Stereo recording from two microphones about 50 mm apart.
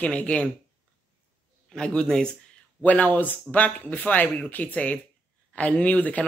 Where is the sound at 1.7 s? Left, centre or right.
Centre.